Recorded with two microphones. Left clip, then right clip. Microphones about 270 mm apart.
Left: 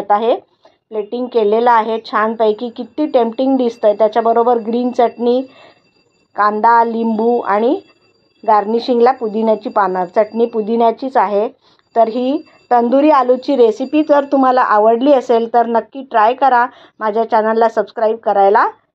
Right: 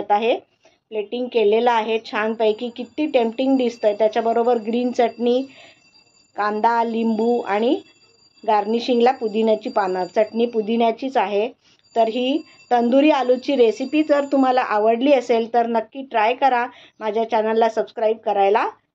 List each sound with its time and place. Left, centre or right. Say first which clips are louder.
0.1 s a woman's voice: left 5 dB; centre